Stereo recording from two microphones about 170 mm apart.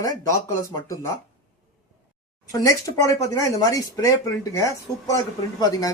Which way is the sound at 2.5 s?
20° left (ahead or behind).